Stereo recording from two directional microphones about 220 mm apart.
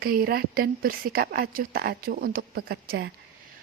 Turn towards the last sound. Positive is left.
turn(degrees=-50)  # may be behind; listen again after turning